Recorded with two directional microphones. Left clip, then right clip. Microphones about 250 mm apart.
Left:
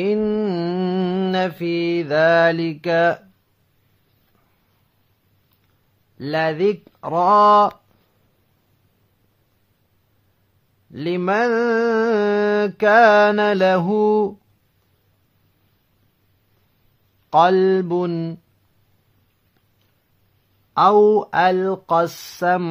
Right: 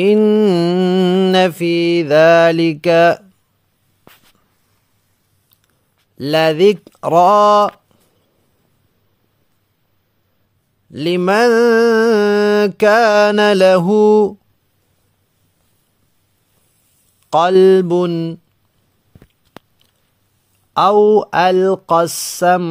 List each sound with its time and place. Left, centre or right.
0.0 s mantra: right
6.1 s mantra: right
10.9 s mantra: right
17.3 s mantra: right
20.7 s mantra: right